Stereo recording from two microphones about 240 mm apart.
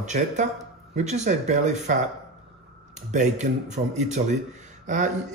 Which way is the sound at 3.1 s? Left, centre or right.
Right.